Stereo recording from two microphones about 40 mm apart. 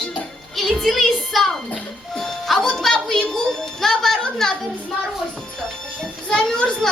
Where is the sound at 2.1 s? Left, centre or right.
Centre.